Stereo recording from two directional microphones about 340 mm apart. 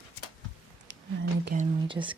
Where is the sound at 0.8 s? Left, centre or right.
Right; by 2.1 s centre.